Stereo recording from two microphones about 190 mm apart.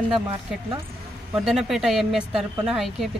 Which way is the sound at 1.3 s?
Centre (ahead or behind).